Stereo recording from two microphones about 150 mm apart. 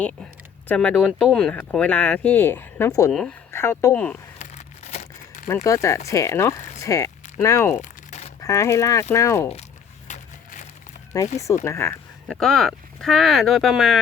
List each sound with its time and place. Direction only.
0.0 s speech: 10° left (ahead or behind)
3.1 s speech: 5° left (ahead or behind)
3.5 s speech: 15° left (ahead or behind)
4.4 s crumpling: 50° left (ahead or behind)
5.6 s speech: 20° left (ahead or behind)
7.8 s crumpling: 55° left (ahead or behind)
8.4 s speech: 20° left (ahead or behind)
10.1 s a sound: 55° left (ahead or behind)
11.1 s speech: 25° left (ahead or behind)
12.3 s speech: centre (ahead or behind)